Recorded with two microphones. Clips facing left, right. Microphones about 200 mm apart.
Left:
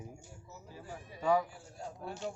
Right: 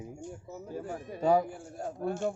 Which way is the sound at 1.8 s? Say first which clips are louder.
Right 9 dB; 50° right (ahead or behind).